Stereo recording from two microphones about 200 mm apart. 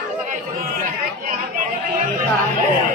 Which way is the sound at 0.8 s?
40° right (ahead or behind).